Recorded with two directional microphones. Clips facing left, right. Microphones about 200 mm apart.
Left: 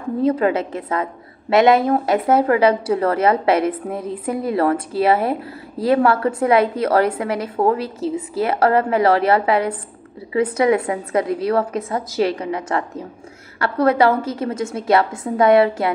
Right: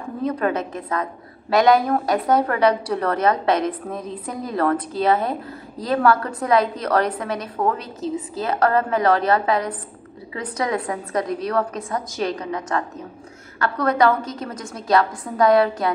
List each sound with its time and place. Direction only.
0.2 s a woman's voice: 25° left (ahead or behind)
3.2 s a woman's voice: 10° left (ahead or behind)
5.8 s a woman's voice: 25° left (ahead or behind)